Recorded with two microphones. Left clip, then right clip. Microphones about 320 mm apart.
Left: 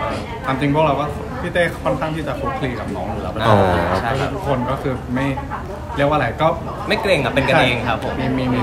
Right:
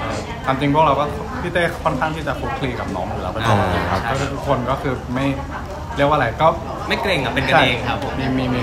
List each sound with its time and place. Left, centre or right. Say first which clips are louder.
0.5 s speech: right 2 dB; centre
3.3 s speech: left 4 dB; centre
5.9 s speech: right 1 dB; centre
6.9 s speech: left 3 dB; centre